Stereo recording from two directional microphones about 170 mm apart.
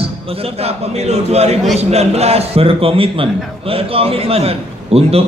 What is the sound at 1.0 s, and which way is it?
A man's voice, 40° right (ahead or behind).